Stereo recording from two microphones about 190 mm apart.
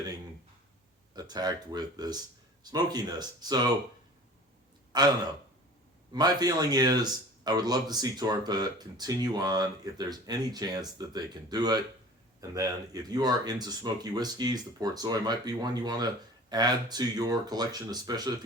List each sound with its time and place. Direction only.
1.1 s speech: 20° right (ahead or behind)
4.9 s speech: 20° right (ahead or behind)
6.1 s speech: 20° right (ahead or behind)